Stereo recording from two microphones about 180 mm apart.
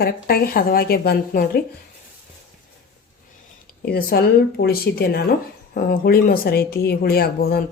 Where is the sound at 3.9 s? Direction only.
60° left (ahead or behind).